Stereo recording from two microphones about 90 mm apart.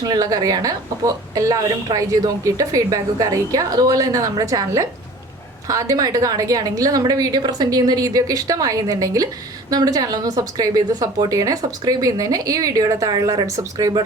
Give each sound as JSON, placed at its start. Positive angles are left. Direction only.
{"t": 0.0, "sound": "a woman's voice", "side_deg": -50}